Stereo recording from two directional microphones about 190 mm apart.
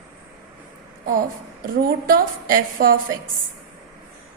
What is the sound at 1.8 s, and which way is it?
A woman's voice, 50° right (ahead or behind).